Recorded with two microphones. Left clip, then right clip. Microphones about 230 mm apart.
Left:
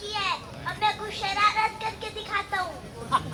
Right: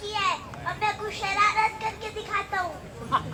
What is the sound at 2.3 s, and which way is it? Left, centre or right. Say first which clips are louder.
Speech: even; centre.